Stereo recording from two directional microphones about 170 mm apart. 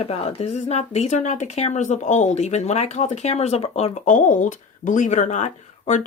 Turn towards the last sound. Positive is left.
turn(degrees=45)  # may be behind; listen again after turning